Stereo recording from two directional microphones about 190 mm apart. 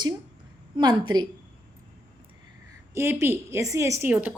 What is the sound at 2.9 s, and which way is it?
A woman's voice, 15° right (ahead or behind).